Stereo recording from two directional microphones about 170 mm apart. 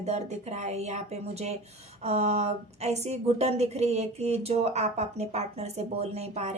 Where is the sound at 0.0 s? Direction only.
40° right (ahead or behind).